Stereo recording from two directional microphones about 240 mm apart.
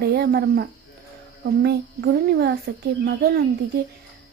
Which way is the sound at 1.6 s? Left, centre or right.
Right.